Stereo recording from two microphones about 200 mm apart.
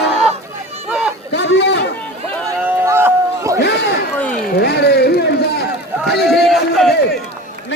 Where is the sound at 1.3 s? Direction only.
60° left (ahead or behind).